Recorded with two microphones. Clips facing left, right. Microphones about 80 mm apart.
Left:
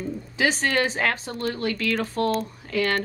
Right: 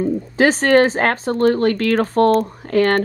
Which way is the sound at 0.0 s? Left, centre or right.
Right.